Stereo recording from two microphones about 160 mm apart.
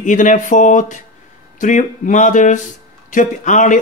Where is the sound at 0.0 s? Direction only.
55° left (ahead or behind).